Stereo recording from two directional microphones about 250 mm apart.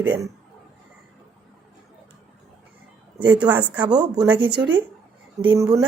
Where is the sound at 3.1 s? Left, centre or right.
Centre.